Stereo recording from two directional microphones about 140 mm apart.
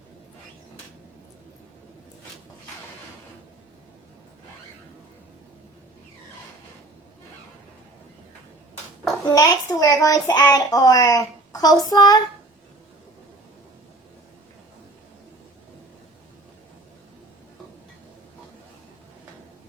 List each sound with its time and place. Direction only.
9.3 s child singing: 30° left (ahead or behind)